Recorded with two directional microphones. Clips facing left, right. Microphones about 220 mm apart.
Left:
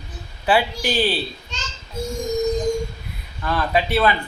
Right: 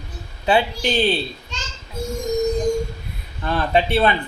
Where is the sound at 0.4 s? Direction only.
25° right (ahead or behind).